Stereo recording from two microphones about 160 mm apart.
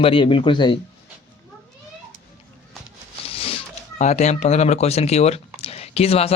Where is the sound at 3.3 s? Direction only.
35° left (ahead or behind).